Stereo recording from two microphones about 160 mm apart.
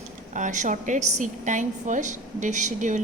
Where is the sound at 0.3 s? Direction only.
50° right (ahead or behind).